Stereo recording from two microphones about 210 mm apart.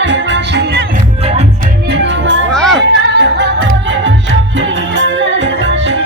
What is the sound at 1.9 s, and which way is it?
Music, 55° right (ahead or behind).